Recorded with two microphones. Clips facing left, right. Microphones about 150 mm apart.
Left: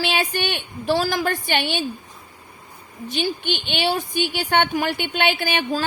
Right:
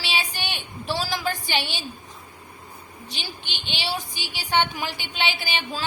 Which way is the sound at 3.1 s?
55° left (ahead or behind).